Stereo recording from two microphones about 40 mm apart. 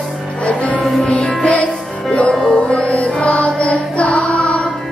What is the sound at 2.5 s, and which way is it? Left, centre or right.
Music, left.